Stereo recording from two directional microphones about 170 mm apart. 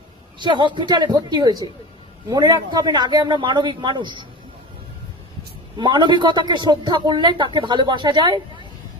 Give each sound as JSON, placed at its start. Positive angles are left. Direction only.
{"t": 0.3, "sound": "a man's voice", "side_deg": -25}
{"t": 5.7, "sound": "a man's voice", "side_deg": -25}